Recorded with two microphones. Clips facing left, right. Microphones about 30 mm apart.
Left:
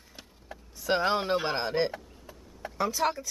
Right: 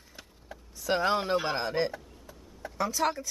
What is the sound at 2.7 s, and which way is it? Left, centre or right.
Speech, centre.